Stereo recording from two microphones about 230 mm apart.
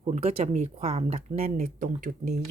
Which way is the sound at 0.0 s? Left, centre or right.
Right.